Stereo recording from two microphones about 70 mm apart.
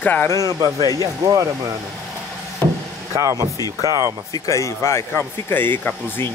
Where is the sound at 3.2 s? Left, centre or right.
Right.